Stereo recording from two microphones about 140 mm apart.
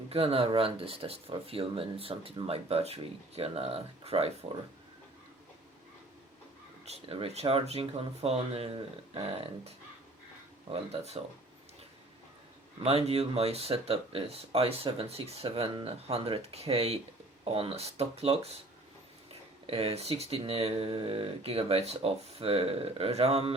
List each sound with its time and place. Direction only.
0.1 s speech: 45° right (ahead or behind)
6.8 s speech: 45° right (ahead or behind)
12.8 s speech: 45° right (ahead or behind)